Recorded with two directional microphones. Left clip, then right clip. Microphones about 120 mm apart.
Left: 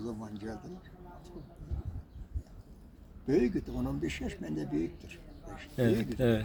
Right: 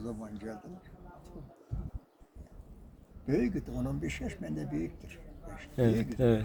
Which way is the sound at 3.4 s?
25° right (ahead or behind).